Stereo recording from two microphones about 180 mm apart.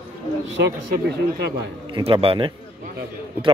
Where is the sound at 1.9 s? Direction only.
25° right (ahead or behind).